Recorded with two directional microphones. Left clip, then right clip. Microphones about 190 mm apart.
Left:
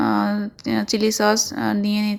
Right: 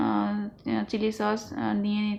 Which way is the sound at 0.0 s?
35° left (ahead or behind).